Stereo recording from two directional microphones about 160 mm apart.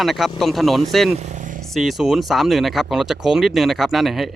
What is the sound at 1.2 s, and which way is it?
Vehicle, 50° right (ahead or behind).